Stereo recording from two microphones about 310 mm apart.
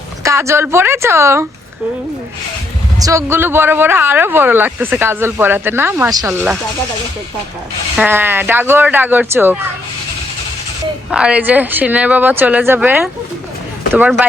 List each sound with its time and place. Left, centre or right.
0.2 s speech: centre
3.0 s speech: centre
7.9 s speech: centre
11.1 s speech: centre